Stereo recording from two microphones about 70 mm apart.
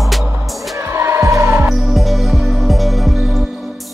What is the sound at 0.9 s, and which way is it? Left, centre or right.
Music, right.